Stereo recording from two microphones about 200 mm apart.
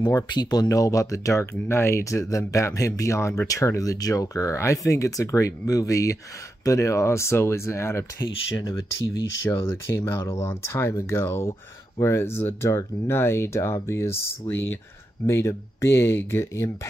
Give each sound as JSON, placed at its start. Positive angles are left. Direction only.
{"t": 0.0, "sound": "speech", "side_deg": 20}
{"t": 15.2, "sound": "speech", "side_deg": 15}